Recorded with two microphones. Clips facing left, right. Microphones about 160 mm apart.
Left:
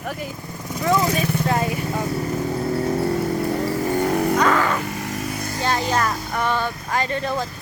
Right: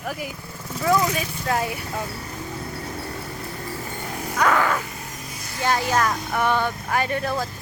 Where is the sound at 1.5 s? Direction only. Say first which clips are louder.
Right 1 dB; centre (ahead or behind).